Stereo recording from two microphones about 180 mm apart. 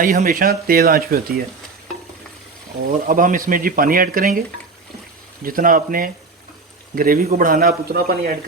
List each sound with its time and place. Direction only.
0.0 s speech: 50° right (ahead or behind)
3.1 s speech: 50° right (ahead or behind)